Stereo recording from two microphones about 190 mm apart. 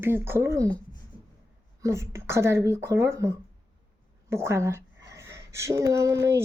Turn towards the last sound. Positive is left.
turn(degrees=-15)  # may be behind; listen again after turning